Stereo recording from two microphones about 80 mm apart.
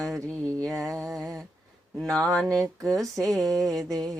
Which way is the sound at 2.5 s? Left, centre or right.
Right.